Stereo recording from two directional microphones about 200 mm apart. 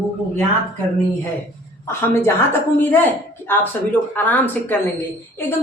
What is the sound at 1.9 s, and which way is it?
A woman's voice, 15° left (ahead or behind).